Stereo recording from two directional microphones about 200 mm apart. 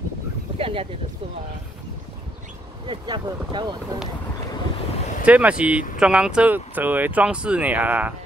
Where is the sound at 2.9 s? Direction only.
25° right (ahead or behind).